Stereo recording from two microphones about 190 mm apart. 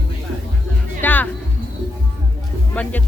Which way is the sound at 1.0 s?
10° left (ahead or behind).